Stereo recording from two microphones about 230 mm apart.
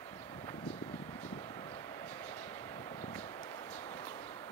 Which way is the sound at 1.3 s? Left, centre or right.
Centre.